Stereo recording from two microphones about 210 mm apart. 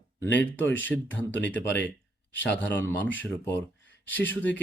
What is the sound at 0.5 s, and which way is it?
Speech, 60° left (ahead or behind).